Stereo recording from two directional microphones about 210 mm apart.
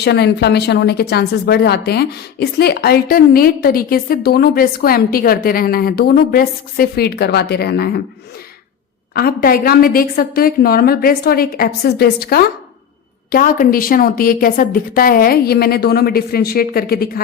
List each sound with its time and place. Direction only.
0.0 s speech: 50° left (ahead or behind)
9.1 s speech: 45° left (ahead or behind)